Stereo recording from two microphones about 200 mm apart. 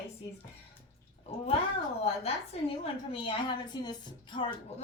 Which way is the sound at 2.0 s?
30° left (ahead or behind).